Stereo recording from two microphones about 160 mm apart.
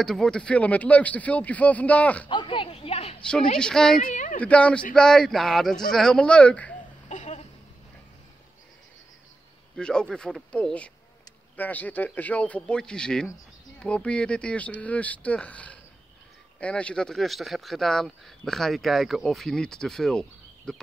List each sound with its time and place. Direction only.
0.0 s speech: 5° left (ahead or behind)
2.2 s speech: 30° left (ahead or behind)
3.2 s speech: 5° left (ahead or behind)
4.0 s speech: 50° left (ahead or behind)
4.4 s speech: 10° left (ahead or behind)
7.1 s a sound: 50° left (ahead or behind)
9.8 s speech: 5° left (ahead or behind)